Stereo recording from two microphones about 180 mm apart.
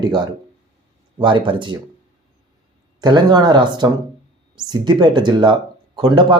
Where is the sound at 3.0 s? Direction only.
25° right (ahead or behind).